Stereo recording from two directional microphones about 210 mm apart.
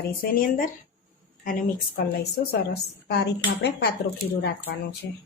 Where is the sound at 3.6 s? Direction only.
50° left (ahead or behind).